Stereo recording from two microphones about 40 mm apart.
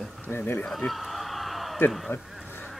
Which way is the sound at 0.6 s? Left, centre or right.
Centre.